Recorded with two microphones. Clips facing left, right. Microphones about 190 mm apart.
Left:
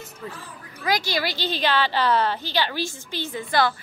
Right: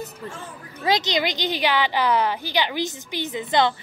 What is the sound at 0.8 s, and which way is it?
A woman's voice, 20° right (ahead or behind).